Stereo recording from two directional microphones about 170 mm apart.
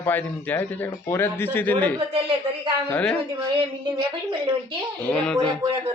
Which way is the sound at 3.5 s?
30° right (ahead or behind).